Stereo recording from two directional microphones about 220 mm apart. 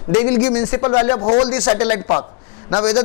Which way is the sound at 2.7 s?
25° left (ahead or behind).